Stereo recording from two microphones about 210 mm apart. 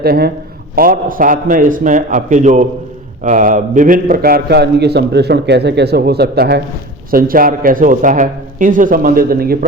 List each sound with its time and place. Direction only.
0.0 s a man's voice: 50° right (ahead or behind)